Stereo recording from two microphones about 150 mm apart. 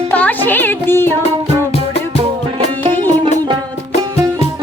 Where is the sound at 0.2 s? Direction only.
10° left (ahead or behind).